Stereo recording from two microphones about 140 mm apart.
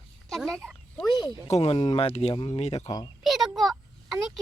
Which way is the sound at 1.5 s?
45° left (ahead or behind).